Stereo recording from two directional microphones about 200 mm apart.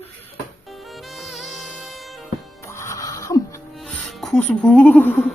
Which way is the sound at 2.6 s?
15° left (ahead or behind).